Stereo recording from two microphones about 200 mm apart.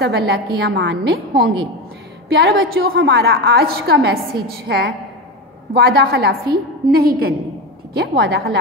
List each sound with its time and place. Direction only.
0.0 s a woman's voice: 55° right (ahead or behind)